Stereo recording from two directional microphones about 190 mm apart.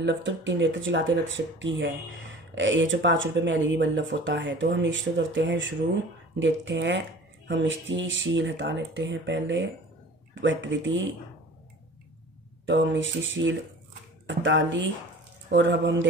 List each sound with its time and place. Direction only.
0.0 s speech: 70° right (ahead or behind)
12.6 s speech: 75° right (ahead or behind)